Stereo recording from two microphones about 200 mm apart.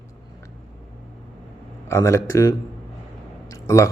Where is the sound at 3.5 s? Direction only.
15° left (ahead or behind).